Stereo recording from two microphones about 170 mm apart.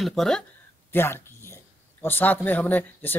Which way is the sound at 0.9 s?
15° left (ahead or behind).